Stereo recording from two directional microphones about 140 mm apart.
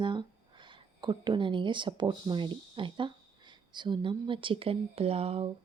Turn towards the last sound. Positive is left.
turn(degrees=-45)  # may be behind; listen again after turning